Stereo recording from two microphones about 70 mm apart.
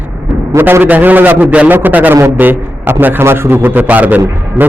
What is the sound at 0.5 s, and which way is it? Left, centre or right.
A man's voice, right.